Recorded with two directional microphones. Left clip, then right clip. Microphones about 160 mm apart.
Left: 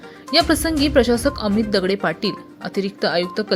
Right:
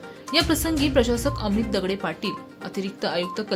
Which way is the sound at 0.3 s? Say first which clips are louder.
Left 5 dB; 25° left (ahead or behind).